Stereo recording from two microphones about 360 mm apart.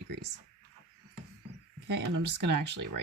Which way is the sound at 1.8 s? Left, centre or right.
Right.